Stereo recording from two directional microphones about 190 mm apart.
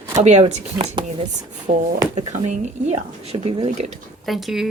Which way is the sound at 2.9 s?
30° right (ahead or behind).